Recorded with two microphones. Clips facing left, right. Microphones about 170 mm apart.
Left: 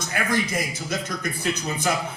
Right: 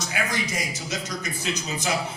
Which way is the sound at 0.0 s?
55° left (ahead or behind).